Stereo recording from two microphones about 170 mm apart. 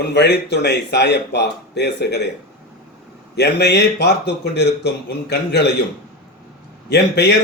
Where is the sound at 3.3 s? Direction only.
75° left (ahead or behind).